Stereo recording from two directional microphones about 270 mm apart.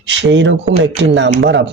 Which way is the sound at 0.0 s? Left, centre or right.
Right.